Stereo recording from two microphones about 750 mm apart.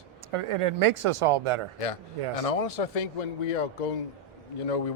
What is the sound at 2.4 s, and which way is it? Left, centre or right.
Speech, left.